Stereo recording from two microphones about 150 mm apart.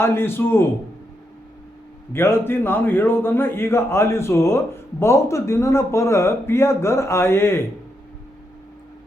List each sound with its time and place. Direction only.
0.0 s a man's voice: 15° left (ahead or behind)
2.1 s a man's voice: 15° left (ahead or behind)